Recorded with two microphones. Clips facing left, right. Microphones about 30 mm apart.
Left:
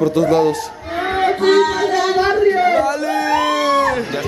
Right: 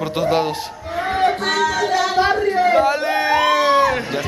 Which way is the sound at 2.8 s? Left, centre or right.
Right.